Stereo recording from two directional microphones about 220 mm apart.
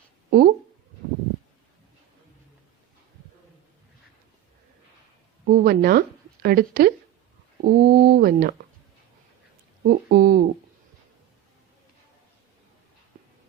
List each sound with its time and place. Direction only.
0.3 s speech: 45° right (ahead or behind)
5.5 s speech: 45° right (ahead or behind)
9.8 s speech: 45° right (ahead or behind)